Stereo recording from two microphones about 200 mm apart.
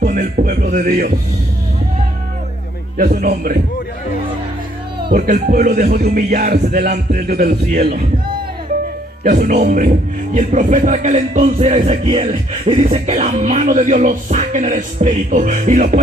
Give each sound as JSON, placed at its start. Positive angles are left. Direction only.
{"t": 0.0, "sound": "music", "side_deg": -45}
{"t": 3.0, "sound": "music", "side_deg": -40}
{"t": 5.0, "sound": "music", "side_deg": -45}
{"t": 9.2, "sound": "speech", "side_deg": -40}